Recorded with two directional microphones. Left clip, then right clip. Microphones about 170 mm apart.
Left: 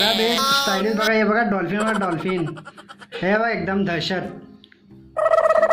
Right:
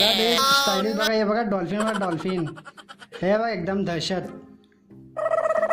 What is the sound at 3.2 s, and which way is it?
Speech, 70° right (ahead or behind).